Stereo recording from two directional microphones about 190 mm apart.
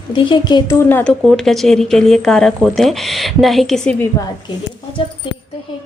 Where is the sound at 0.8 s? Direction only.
10° left (ahead or behind).